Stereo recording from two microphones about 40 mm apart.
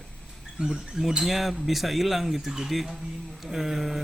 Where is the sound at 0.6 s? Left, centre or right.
Centre.